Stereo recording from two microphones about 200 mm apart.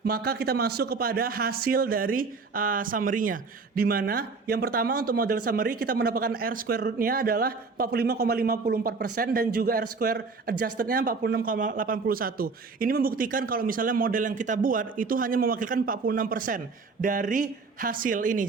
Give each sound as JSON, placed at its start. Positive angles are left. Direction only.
{"t": 0.0, "sound": "speech", "side_deg": -50}